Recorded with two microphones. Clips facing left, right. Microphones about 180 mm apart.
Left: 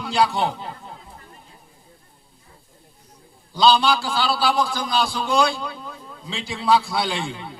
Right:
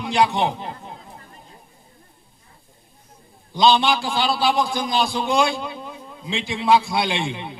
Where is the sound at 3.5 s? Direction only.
20° right (ahead or behind).